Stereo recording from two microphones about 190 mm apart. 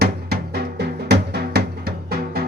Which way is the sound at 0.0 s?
55° right (ahead or behind).